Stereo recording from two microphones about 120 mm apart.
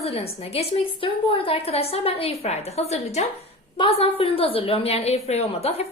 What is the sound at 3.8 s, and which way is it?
A woman's voice, 50° left (ahead or behind).